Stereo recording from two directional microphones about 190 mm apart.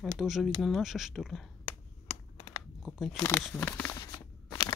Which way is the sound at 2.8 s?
Centre (ahead or behind).